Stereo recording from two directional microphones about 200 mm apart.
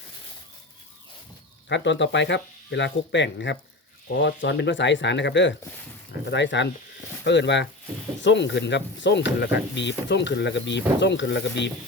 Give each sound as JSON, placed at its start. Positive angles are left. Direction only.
{"t": 1.7, "sound": "speech", "side_deg": 65}